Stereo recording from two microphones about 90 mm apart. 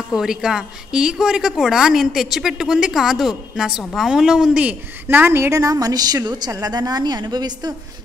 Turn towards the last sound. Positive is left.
turn(degrees=-50)  # may be behind; listen again after turning